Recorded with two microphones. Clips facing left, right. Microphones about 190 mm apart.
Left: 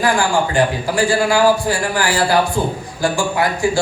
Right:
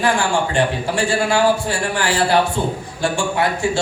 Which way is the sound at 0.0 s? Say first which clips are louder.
Left 2 dB; 25° right (ahead or behind).